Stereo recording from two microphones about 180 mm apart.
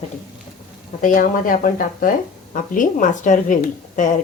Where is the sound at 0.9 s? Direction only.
45° left (ahead or behind).